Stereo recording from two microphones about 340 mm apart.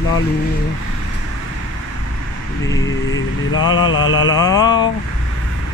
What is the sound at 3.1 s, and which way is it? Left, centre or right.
Vehicle, left.